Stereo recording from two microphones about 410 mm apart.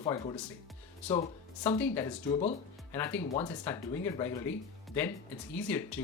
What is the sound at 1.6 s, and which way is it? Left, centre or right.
Speech, centre.